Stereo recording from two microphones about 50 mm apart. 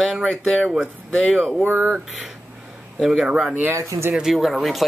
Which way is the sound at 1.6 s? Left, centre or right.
Right.